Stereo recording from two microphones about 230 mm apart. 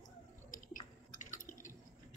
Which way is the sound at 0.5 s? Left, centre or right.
Left.